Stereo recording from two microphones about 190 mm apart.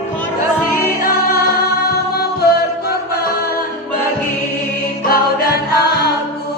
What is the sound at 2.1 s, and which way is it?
Music, 55° left (ahead or behind).